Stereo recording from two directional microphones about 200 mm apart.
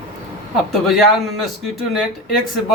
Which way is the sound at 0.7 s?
Centre (ahead or behind).